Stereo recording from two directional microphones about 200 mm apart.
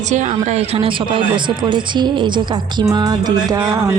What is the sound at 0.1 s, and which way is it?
A woman's voice, 35° right (ahead or behind).